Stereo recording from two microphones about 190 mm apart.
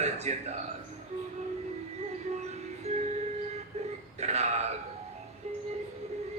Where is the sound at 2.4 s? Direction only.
35° right (ahead or behind).